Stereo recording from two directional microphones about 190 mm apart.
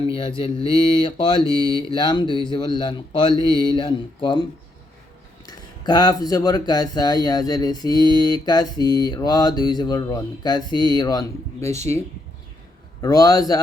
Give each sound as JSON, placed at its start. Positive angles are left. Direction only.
{"t": 0.1, "sound": "speech", "side_deg": 25}
{"t": 5.5, "sound": "speech", "side_deg": 20}
{"t": 13.0, "sound": "speech", "side_deg": 20}